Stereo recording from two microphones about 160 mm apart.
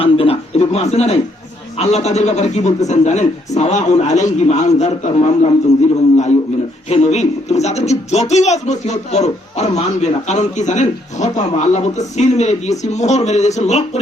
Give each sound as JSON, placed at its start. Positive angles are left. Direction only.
{"t": 0.0, "sound": "speech", "side_deg": 35}
{"t": 6.9, "sound": "speech", "side_deg": 45}